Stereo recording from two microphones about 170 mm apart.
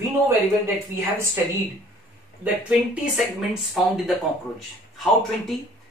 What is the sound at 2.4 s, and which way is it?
Speech, 5° right (ahead or behind).